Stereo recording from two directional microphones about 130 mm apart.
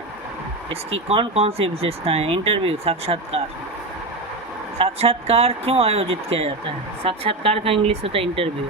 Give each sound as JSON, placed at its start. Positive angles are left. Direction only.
{"t": 0.7, "sound": "speech", "side_deg": -50}
{"t": 4.8, "sound": "speech", "side_deg": -50}